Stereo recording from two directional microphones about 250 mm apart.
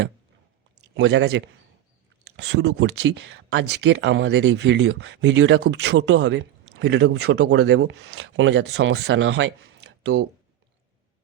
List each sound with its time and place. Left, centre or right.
0.9 s speech: right